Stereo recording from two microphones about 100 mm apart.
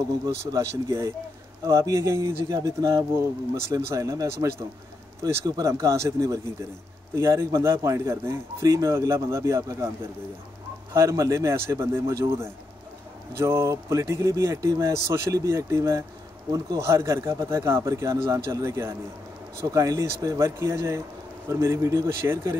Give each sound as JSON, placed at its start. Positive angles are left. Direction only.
{"t": 0.5, "sound": "speech", "side_deg": -30}
{"t": 10.9, "sound": "speech", "side_deg": -30}